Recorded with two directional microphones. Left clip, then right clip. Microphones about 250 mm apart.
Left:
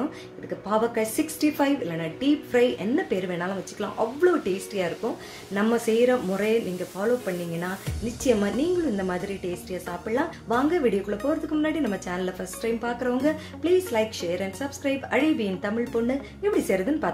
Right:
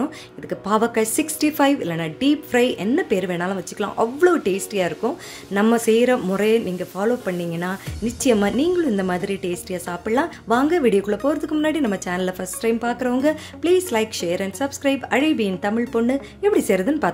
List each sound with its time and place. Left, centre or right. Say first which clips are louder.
0.7 s a woman's voice: right 5 dB; right